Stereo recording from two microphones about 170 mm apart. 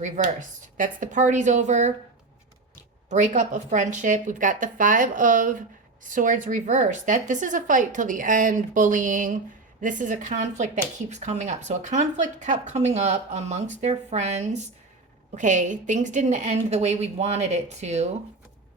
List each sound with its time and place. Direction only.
0.0 s speech: 50° right (ahead or behind)
3.1 s a woman's voice: 45° right (ahead or behind)